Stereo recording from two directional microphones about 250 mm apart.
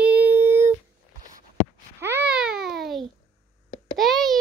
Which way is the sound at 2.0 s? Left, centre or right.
Centre.